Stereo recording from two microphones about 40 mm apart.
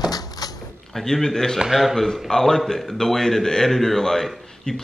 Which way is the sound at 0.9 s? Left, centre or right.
Centre.